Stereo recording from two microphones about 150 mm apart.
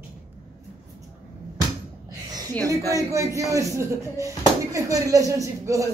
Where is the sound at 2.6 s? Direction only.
25° right (ahead or behind).